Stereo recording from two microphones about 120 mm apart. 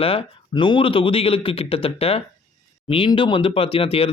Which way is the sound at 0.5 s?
40° left (ahead or behind).